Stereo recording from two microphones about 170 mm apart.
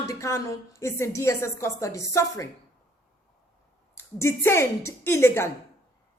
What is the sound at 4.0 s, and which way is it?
Speech, 15° left (ahead or behind).